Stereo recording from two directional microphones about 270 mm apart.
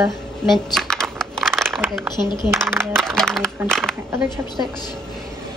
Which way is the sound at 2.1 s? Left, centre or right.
Centre.